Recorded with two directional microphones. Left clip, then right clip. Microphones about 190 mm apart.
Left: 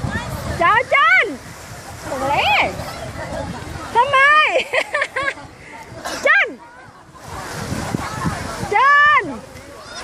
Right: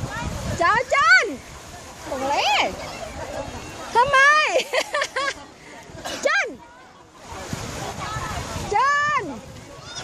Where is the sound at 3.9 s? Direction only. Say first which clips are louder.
Left 3 dB; 25° right (ahead or behind).